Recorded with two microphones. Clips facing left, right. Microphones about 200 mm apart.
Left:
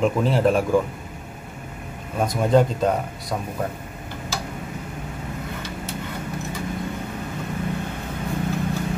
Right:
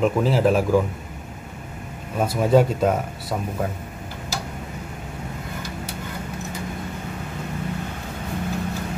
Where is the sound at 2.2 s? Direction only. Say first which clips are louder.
Right 1 dB; 5° right (ahead or behind).